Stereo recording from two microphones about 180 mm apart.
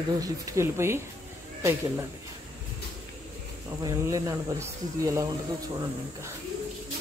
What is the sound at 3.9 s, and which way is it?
Speech, 20° right (ahead or behind).